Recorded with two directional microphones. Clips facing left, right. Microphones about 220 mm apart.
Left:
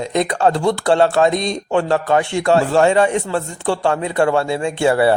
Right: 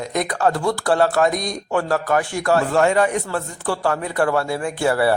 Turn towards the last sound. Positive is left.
turn(degrees=25)  # may be behind; listen again after turning